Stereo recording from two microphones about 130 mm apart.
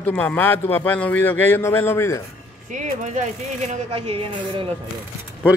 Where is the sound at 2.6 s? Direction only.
70° right (ahead or behind); by 4.7 s 45° right (ahead or behind).